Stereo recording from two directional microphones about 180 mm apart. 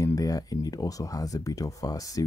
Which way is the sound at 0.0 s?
20° left (ahead or behind).